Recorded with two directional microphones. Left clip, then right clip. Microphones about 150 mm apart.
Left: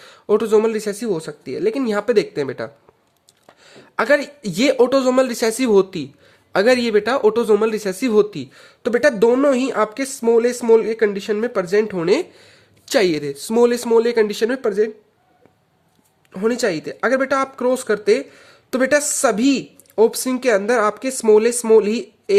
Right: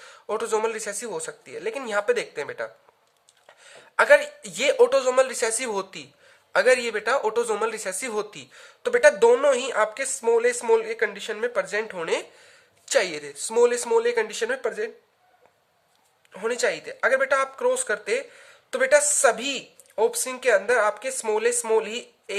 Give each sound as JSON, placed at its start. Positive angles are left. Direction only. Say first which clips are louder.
{"t": 0.0, "sound": "speech", "louder": "left 10 dB", "side_deg": 30}
{"t": 16.3, "sound": "speech", "louder": "left 5 dB", "side_deg": 35}